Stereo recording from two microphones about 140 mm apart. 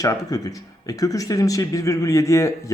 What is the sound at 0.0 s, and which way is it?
Speech, 25° left (ahead or behind).